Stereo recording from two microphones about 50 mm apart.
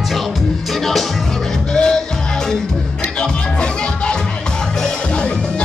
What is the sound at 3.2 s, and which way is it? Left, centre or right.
Music, centre.